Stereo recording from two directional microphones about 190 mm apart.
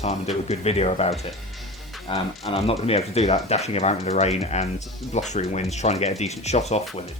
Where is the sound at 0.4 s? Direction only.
35° left (ahead or behind).